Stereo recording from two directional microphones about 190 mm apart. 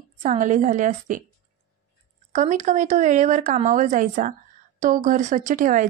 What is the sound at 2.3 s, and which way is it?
A woman's voice, 40° right (ahead or behind).